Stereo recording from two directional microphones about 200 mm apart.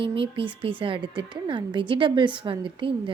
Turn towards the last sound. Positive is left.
turn(degrees=-25)  # may be behind; listen again after turning